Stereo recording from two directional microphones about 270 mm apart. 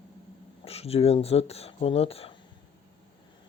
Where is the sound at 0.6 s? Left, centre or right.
Left.